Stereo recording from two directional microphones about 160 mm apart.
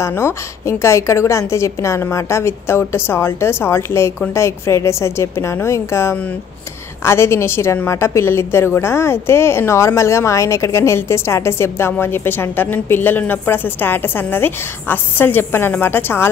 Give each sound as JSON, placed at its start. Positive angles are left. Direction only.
{"t": 0.0, "sound": "a woman's voice", "side_deg": 15}